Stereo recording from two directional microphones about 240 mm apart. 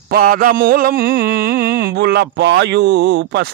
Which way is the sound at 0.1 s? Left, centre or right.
Right.